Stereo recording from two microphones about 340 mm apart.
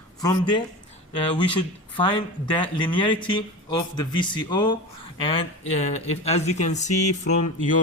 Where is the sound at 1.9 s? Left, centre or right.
Centre.